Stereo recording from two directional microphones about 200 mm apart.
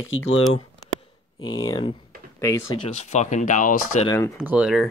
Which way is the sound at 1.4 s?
20° left (ahead or behind).